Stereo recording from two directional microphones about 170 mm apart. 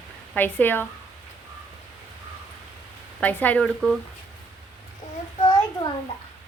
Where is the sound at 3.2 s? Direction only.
10° left (ahead or behind).